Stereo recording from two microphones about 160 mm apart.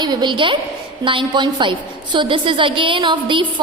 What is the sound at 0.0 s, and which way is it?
A woman's voice, 25° right (ahead or behind).